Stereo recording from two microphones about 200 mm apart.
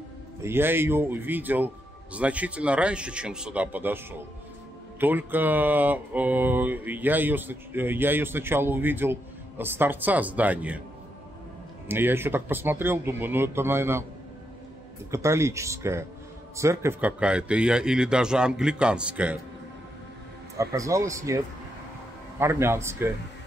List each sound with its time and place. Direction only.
0.4 s speech: 10° right (ahead or behind)
11.9 s speech: 10° right (ahead or behind)
15.0 s speech: 15° right (ahead or behind)
20.5 s speech: 15° right (ahead or behind)
22.4 s speech: 15° right (ahead or behind)